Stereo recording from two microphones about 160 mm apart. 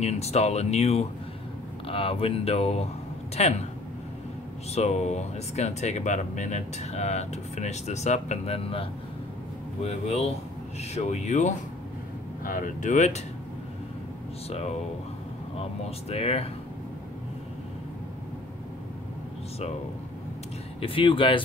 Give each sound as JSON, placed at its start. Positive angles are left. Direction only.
{"t": 0.0, "sound": "speech", "side_deg": 40}
{"t": 4.7, "sound": "speech", "side_deg": 45}
{"t": 9.8, "sound": "speech", "side_deg": 40}
{"t": 14.5, "sound": "speech", "side_deg": 40}
{"t": 20.8, "sound": "speech", "side_deg": 35}